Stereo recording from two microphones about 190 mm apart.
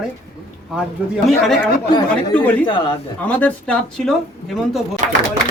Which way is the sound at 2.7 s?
25° left (ahead or behind).